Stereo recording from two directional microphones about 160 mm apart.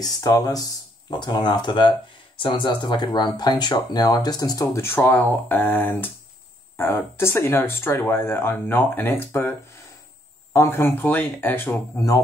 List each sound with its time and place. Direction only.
0.0 s speech: 25° left (ahead or behind)